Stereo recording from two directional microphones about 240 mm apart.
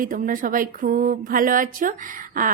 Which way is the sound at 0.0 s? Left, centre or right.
Right.